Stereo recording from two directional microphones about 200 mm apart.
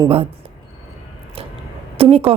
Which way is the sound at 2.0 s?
30° right (ahead or behind).